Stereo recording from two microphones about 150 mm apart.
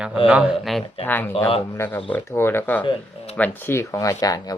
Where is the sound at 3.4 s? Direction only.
15° left (ahead or behind).